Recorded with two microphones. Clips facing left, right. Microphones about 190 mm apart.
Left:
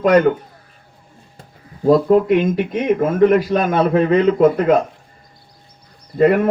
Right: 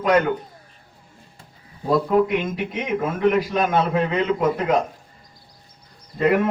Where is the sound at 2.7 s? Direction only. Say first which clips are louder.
Left 9 dB; 50° left (ahead or behind).